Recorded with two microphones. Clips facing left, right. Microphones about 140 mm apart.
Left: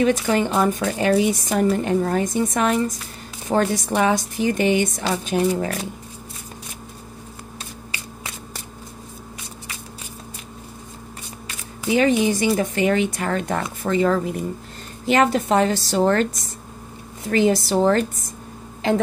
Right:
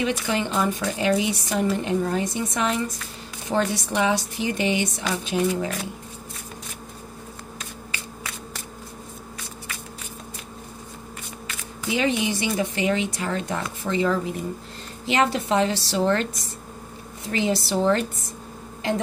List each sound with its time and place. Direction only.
0.0 s speech: 45° left (ahead or behind)
11.4 s speech: 40° left (ahead or behind)
17.3 s speech: 50° left (ahead or behind)